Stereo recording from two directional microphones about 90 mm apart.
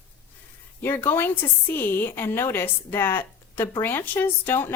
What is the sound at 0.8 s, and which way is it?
A woman's voice, 25° left (ahead or behind).